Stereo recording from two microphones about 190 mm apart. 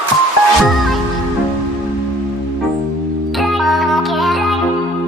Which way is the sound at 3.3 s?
Centre (ahead or behind).